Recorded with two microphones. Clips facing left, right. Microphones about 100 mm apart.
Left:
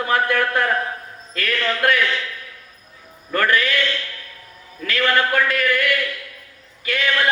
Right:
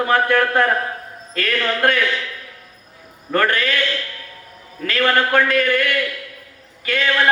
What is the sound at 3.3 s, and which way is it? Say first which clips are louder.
Speech: right 1 dB; 35° right (ahead or behind).